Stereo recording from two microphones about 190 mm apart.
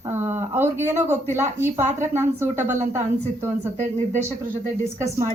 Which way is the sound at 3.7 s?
35° right (ahead or behind).